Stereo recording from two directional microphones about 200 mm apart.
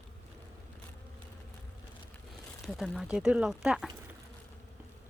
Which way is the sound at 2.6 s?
Centre (ahead or behind).